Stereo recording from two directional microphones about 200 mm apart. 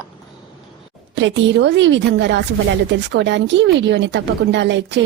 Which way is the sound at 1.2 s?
65° right (ahead or behind).